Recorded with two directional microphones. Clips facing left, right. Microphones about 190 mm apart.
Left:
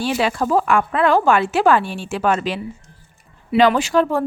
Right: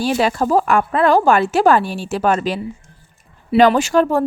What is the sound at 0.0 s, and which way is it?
Speech, 40° right (ahead or behind).